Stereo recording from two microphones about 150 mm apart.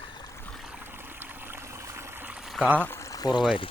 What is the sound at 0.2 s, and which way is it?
Boat, 20° left (ahead or behind).